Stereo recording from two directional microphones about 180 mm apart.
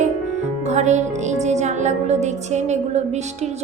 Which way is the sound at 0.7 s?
40° right (ahead or behind).